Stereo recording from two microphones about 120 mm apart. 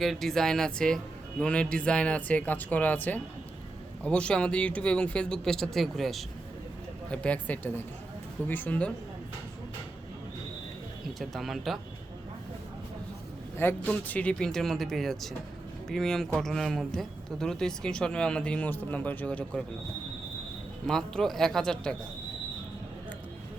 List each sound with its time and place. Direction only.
0.0 s speech: centre (ahead or behind)
11.2 s speech: centre (ahead or behind)
13.6 s a man's voice: 20° left (ahead or behind)
20.8 s speech: 5° left (ahead or behind)